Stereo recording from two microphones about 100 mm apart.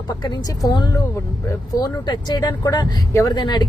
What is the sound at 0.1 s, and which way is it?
A woman's voice, 40° left (ahead or behind).